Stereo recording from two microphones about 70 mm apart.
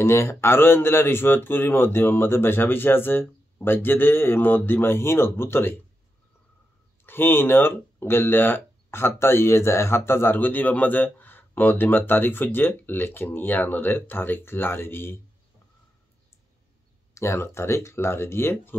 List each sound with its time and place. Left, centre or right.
0.0 s speech: left
7.1 s speech: left
17.1 s speech: left